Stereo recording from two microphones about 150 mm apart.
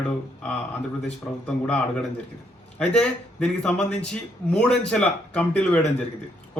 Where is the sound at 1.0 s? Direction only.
5° left (ahead or behind).